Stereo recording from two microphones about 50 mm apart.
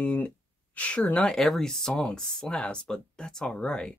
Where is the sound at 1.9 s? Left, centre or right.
Centre.